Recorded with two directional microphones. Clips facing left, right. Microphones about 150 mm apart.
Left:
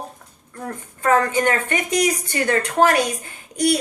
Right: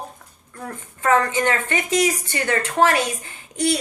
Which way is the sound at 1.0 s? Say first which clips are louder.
Left 1 dB; 40° left (ahead or behind).